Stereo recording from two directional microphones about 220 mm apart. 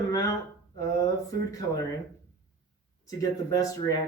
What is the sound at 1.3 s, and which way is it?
Speech, 15° left (ahead or behind).